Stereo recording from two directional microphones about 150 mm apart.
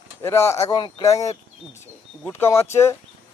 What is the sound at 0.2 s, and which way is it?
Speech, 15° left (ahead or behind).